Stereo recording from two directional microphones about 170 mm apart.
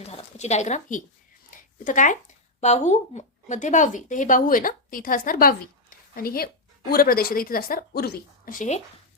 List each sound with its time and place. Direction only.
0.0 s speech: 35° left (ahead or behind)
1.5 s a sound: 50° left (ahead or behind)
2.6 s a woman's voice: 40° left (ahead or behind)